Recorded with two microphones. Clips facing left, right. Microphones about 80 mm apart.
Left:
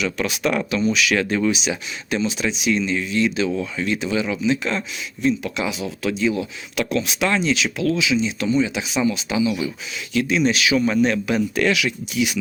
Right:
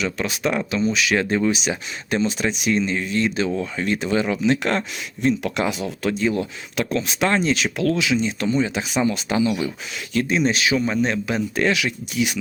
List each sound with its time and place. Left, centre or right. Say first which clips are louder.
0.0 s speech: left 1 dB; right